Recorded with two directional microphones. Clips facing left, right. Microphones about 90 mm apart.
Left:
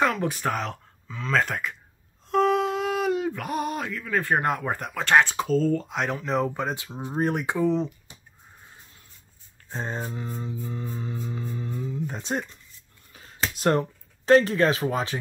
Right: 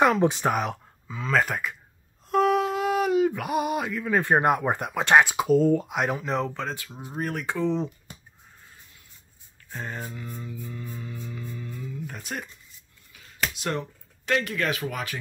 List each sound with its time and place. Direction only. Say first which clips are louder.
0.0 s speech: right 4 dB; 20° right (ahead or behind); by 1.8 s 5° right (ahead or behind)
2.2 s a sound: even; 5° right (ahead or behind)
4.0 s speech: right 3 dB; 20° right (ahead or behind); by 6.5 s centre (ahead or behind)
6.5 s music: left 3 dB; 15° left (ahead or behind)
7.6 s speech: left 2 dB; centre (ahead or behind)
9.7 s a sound: left 3 dB; 25° left (ahead or behind)
10.1 s music: left 4 dB; 30° left (ahead or behind)
13.1 s a sound: left 3 dB; 35° left (ahead or behind)
13.6 s speech: left 7 dB; 40° left (ahead or behind)